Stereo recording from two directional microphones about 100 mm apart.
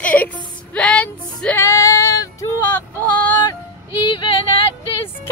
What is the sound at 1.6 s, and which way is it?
Female singing, 30° left (ahead or behind).